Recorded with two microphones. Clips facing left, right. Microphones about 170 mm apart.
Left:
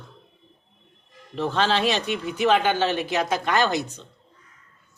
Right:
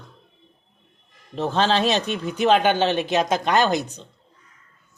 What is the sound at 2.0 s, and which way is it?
Speech, 15° left (ahead or behind).